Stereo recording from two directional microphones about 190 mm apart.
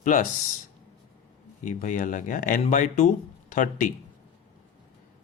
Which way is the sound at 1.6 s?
40° left (ahead or behind).